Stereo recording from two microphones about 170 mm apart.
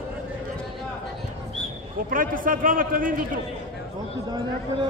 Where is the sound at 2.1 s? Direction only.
55° right (ahead or behind).